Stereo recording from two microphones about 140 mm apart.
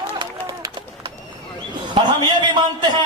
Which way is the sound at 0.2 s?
25° right (ahead or behind).